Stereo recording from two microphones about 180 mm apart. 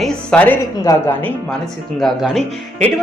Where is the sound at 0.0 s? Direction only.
5° left (ahead or behind).